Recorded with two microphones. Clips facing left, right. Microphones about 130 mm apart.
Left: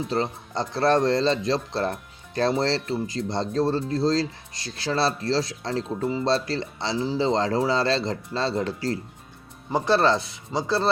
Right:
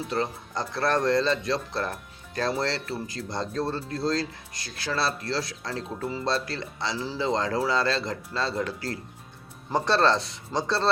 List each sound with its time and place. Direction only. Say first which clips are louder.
0.1 s speech: left 2 dB; 25° left (ahead or behind)
9.6 s speech: left 2 dB; 5° left (ahead or behind)